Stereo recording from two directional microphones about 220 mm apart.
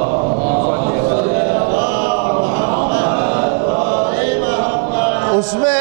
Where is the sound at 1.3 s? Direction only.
15° right (ahead or behind).